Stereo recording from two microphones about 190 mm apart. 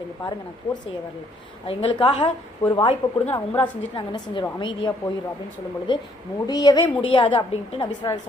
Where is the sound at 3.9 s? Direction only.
25° left (ahead or behind).